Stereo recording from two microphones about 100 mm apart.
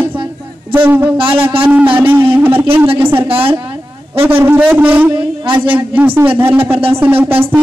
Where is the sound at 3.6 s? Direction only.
60° right (ahead or behind).